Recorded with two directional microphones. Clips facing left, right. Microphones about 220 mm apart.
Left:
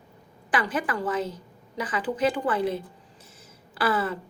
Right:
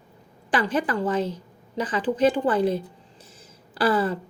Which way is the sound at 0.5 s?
30° right (ahead or behind).